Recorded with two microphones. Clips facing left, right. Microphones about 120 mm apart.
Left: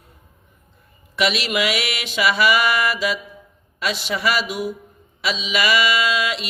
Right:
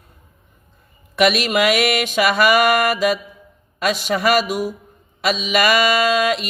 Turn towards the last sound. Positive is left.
turn(degrees=-50)  # may be behind; listen again after turning